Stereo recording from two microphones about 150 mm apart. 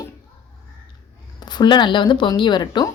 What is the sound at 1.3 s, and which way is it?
Speech, 30° left (ahead or behind).